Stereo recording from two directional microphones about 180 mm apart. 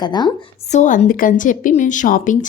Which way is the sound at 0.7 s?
40° left (ahead or behind).